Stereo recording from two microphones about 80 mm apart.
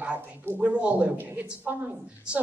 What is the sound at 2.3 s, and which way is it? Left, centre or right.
Speech, centre.